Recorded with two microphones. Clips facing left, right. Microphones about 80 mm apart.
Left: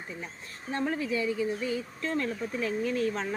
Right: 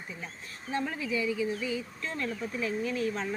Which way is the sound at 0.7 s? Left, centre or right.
Left.